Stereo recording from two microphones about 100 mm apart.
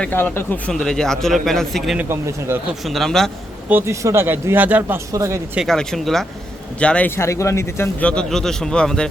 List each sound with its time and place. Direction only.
0.0 s a man's voice: 20° left (ahead or behind)
0.7 s speech: 5° left (ahead or behind)
2.0 s speech: 25° right (ahead or behind)
2.8 s speech: centre (ahead or behind)
3.7 s speech: 25° right (ahead or behind)
4.8 s speech: 30° right (ahead or behind)
5.6 s a man's voice: 5° left (ahead or behind)
7.2 s speech: 30° left (ahead or behind)
8.0 s a man's voice: 10° left (ahead or behind)